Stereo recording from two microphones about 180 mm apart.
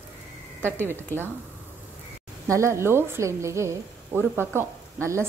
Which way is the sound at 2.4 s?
15° right (ahead or behind).